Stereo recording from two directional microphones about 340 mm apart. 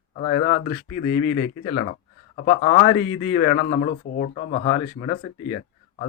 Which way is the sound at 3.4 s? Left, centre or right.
Centre.